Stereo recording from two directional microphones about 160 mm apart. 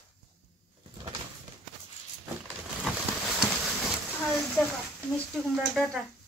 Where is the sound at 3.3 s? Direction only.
Centre (ahead or behind).